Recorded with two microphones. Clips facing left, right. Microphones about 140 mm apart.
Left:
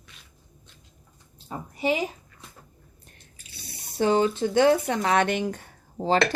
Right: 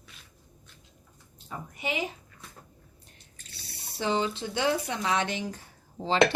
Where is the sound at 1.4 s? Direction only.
35° left (ahead or behind).